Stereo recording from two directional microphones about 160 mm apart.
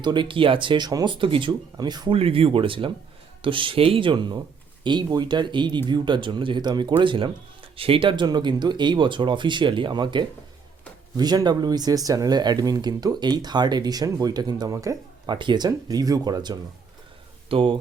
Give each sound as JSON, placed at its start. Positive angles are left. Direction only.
{"t": 0.0, "sound": "speech", "side_deg": -30}